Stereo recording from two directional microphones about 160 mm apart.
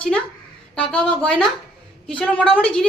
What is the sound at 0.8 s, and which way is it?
A woman's voice, 5° left (ahead or behind).